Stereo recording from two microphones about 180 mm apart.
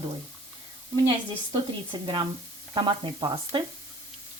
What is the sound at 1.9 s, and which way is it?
Speech, 25° right (ahead or behind).